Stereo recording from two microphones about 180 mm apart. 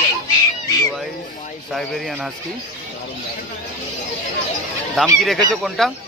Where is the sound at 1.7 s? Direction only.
Centre (ahead or behind).